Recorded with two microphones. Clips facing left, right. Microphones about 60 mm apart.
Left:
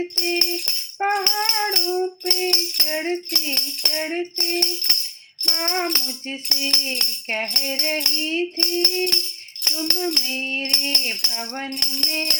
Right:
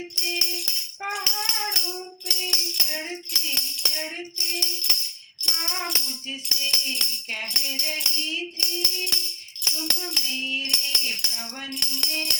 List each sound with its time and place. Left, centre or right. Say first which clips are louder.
0.2 s music: left 7 dB; left
4.4 s music: left 7 dB; left